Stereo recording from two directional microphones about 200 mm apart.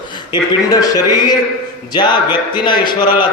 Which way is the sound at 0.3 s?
20° left (ahead or behind).